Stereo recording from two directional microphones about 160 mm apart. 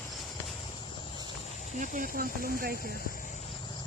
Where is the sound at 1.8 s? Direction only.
60° right (ahead or behind).